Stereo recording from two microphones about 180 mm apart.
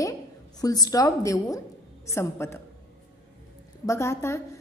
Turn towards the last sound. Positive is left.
turn(degrees=15)  # may be behind; listen again after turning